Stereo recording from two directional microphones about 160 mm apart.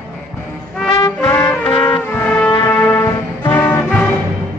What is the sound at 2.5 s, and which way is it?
Music, 25° left (ahead or behind).